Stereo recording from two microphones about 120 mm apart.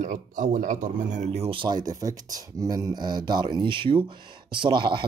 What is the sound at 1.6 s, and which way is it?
Speech, 35° right (ahead or behind).